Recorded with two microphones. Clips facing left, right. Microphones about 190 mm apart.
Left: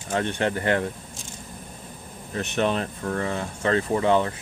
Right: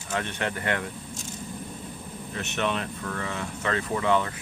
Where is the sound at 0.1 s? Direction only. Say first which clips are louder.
Left 5 dB; 30° left (ahead or behind).